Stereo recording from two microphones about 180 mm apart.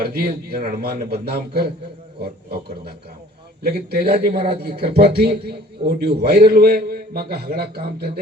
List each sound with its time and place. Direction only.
0.0 s a man's voice: 55° right (ahead or behind)